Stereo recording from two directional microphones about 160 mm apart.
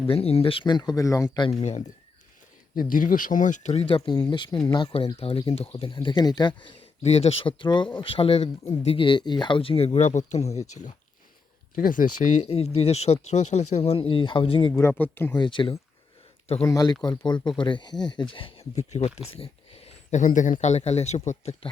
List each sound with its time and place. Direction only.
0.1 s speech: 40° left (ahead or behind); by 1.5 s 20° left (ahead or behind)
1.5 s speech: 45° left (ahead or behind)
2.9 s speech: 60° left (ahead or behind); by 6.7 s 30° left (ahead or behind)
7.0 s speech: 40° left (ahead or behind)
11.7 s speech: 60° left (ahead or behind); by 14.7 s 35° left (ahead or behind)
14.7 s speech: 15° left (ahead or behind)
15.4 s speech: 30° left (ahead or behind)